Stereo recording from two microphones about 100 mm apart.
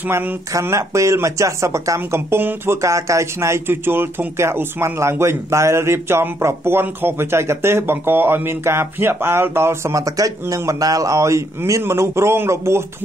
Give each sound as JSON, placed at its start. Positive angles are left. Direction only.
{"t": 0.0, "sound": "speech", "side_deg": -20}
{"t": 0.5, "sound": "speech", "side_deg": -30}